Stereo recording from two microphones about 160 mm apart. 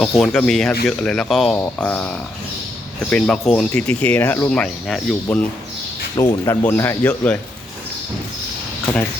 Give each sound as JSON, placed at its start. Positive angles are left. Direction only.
{"t": 0.0, "sound": "speech", "side_deg": 0}
{"t": 6.1, "sound": "speech", "side_deg": 20}